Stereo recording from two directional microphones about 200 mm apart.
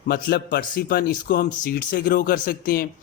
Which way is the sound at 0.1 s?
50° left (ahead or behind).